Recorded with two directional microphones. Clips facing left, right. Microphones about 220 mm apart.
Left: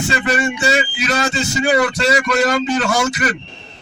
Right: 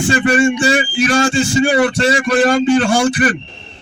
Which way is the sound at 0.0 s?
30° right (ahead or behind).